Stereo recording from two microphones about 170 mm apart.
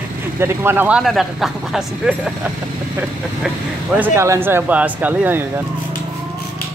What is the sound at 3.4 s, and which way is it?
Speech, 5° right (ahead or behind).